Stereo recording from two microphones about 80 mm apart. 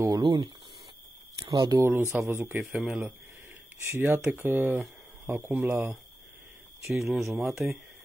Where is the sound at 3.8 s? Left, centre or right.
Right.